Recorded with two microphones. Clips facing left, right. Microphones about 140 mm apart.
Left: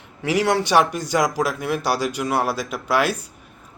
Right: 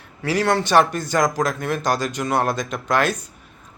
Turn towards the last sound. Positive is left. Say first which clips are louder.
# even
turn(degrees=10)  # may be behind; listen again after turning